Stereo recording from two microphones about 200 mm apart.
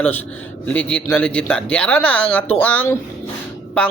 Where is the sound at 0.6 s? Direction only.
5° left (ahead or behind).